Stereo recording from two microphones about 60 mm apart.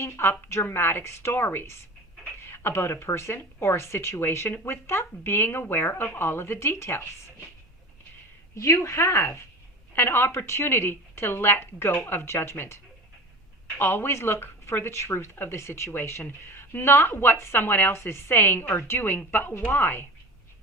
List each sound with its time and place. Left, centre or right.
0.0 s a woman's voice: left
8.5 s a woman's voice: left
17.6 s a woman's voice: left